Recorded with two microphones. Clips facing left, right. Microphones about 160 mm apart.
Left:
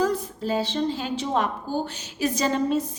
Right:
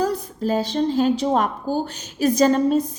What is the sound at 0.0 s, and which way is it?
A woman's voice, 45° right (ahead or behind).